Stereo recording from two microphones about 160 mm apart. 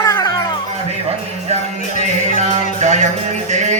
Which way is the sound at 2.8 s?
45° right (ahead or behind).